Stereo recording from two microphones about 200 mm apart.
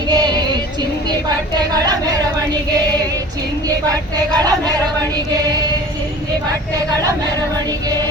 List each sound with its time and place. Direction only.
0.1 s music: 20° right (ahead or behind)
1.7 s vehicle: 20° right (ahead or behind)
4.4 s speech: 20° right (ahead or behind)